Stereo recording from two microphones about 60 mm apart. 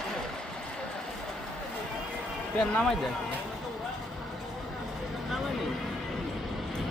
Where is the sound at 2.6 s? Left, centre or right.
Centre.